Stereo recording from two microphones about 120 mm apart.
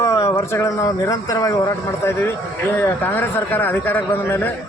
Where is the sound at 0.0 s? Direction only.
25° left (ahead or behind).